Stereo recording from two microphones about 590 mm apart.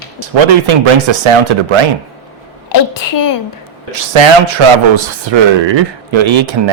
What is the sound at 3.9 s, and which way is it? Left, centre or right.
Speech, right.